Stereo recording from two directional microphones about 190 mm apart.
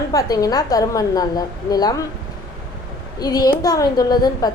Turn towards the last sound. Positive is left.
turn(degrees=20)  # may be behind; listen again after turning